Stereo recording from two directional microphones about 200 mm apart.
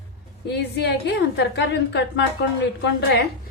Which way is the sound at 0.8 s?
55° left (ahead or behind).